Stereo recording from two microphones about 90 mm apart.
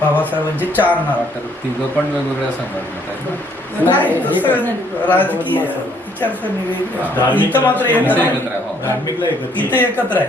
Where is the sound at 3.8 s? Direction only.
20° left (ahead or behind).